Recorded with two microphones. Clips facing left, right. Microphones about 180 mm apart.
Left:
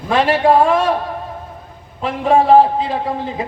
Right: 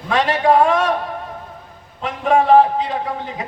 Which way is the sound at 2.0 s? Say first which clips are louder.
Left 2 dB; 30° left (ahead or behind).